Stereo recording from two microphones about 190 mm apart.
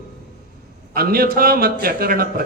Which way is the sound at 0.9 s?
50° right (ahead or behind).